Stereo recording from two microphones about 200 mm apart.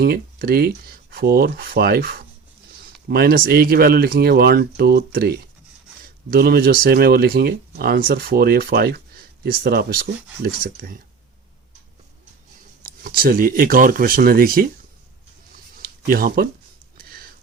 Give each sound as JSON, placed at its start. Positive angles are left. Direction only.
{"t": 0.0, "sound": "speech", "side_deg": -50}
{"t": 12.8, "sound": "speech", "side_deg": -45}
{"t": 15.8, "sound": "a sound", "side_deg": -45}